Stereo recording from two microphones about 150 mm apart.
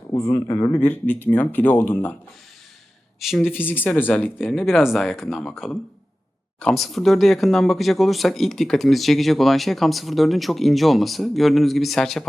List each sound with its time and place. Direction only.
0.1 s speech: 35° left (ahead or behind)
0.5 s speech: 15° left (ahead or behind)
3.2 s speech: centre (ahead or behind)
3.5 s speech: 10° left (ahead or behind)
4.4 s speech: centre (ahead or behind)